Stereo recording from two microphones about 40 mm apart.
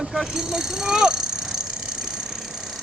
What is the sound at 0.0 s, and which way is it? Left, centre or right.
Vehicle, centre.